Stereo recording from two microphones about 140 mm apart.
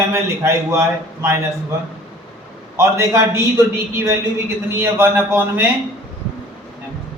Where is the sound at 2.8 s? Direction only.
20° right (ahead or behind).